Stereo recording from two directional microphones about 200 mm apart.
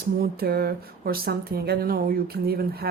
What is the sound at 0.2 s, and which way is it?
Speech, 50° right (ahead or behind).